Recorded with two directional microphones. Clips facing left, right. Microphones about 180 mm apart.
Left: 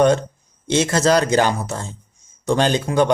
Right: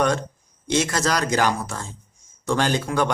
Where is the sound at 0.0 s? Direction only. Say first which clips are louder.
Left 6 dB; 25° left (ahead or behind).